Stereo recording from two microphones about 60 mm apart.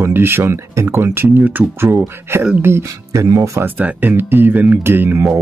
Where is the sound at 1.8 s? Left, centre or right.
Right.